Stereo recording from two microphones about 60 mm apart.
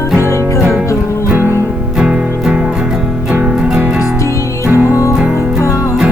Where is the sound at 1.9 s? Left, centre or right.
Centre.